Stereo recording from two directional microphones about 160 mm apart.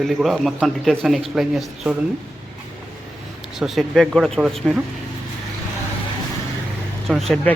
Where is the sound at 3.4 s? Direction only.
5° right (ahead or behind).